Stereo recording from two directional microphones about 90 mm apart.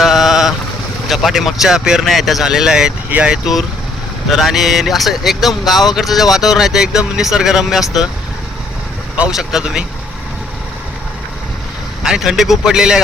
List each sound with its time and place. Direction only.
0.0 s boat: centre (ahead or behind)
1.0 s speech: centre (ahead or behind)
3.1 s speech: 15° right (ahead or behind)
3.3 s speech: 5° right (ahead or behind)
9.1 s speech: 10° right (ahead or behind)
12.0 s speech: 10° right (ahead or behind)